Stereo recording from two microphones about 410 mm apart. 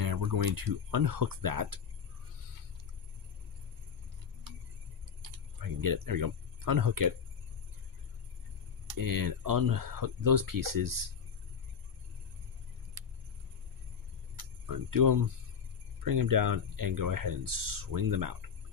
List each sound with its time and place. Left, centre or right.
0.0 s speech: right
5.6 s speech: right
8.9 s speech: right
14.7 s speech: right